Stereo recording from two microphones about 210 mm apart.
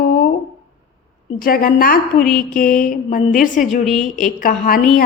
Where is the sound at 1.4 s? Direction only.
45° left (ahead or behind).